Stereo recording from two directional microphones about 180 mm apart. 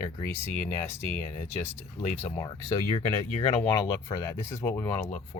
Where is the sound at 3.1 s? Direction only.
35° left (ahead or behind).